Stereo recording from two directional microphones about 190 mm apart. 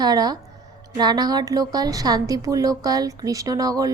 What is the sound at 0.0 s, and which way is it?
A woman's voice, 20° right (ahead or behind).